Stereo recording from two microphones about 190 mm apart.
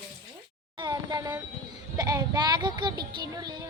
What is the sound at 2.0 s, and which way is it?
Child singing, 15° right (ahead or behind).